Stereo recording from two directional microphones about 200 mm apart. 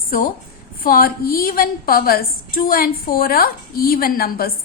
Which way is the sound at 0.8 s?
45° left (ahead or behind).